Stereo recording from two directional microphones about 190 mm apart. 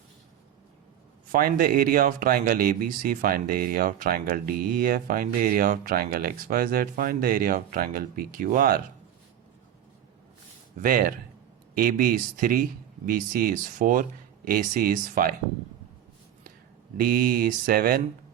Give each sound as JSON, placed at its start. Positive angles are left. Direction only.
{"t": 1.3, "sound": "speech", "side_deg": -50}
{"t": 10.8, "sound": "speech", "side_deg": -45}
{"t": 17.0, "sound": "speech", "side_deg": -50}